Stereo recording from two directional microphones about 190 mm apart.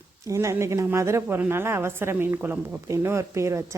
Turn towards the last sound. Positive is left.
turn(degrees=-15)  # may be behind; listen again after turning